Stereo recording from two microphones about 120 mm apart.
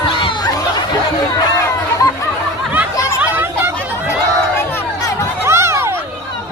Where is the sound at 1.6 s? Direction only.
25° left (ahead or behind).